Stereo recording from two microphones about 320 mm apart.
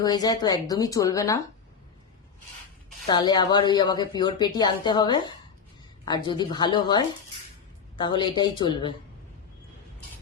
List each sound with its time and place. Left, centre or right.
0.0 s speech: centre
3.1 s speech: centre